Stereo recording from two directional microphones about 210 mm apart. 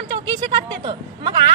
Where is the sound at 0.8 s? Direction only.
20° right (ahead or behind).